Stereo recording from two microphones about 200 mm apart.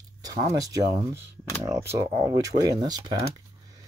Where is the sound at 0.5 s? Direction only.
15° right (ahead or behind).